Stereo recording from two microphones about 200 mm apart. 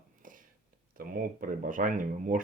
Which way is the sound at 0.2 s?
45° right (ahead or behind).